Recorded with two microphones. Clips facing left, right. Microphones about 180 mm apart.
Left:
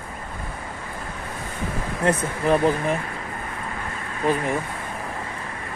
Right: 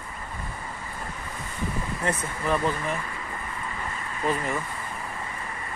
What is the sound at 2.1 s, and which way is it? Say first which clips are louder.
Speech: left 7 dB; 40° left (ahead or behind).